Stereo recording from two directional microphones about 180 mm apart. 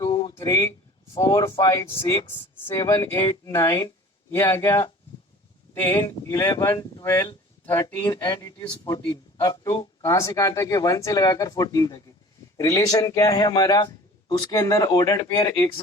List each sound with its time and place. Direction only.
0.0 s a sound: 25° left (ahead or behind)
1.1 s speech: 20° left (ahead or behind)
8.0 s speech: 20° left (ahead or behind)